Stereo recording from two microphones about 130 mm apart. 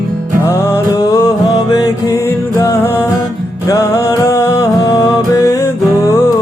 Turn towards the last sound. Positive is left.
turn(degrees=20)  # may be behind; listen again after turning